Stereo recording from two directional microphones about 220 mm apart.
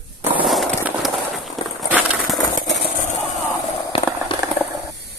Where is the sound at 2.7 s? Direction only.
45° left (ahead or behind).